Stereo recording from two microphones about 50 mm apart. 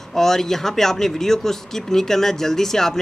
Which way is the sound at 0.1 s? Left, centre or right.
Centre.